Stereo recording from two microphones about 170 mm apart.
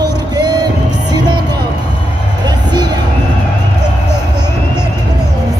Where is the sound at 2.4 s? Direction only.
25° right (ahead or behind).